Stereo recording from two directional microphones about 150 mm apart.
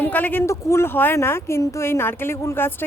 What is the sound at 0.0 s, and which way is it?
A woman's voice, 10° left (ahead or behind).